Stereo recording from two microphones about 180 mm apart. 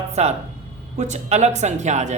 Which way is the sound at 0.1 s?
35° right (ahead or behind).